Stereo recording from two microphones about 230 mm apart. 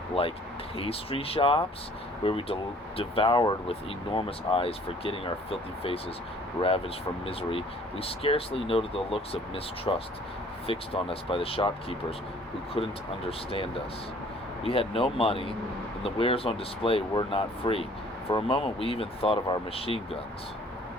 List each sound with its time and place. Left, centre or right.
0.2 s speech: left
14.6 s speech: left